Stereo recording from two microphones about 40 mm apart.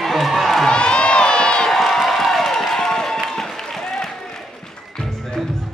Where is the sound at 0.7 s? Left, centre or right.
Left.